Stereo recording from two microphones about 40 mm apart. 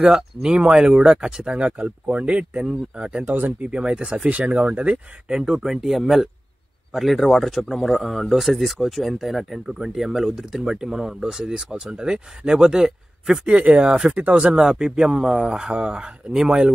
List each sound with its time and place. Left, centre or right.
0.0 s speech: right
1.8 s speech: right
3.3 s speech: right
3.6 s speech: right
4.3 s speech: right
5.3 s speech: centre
13.5 s speech: right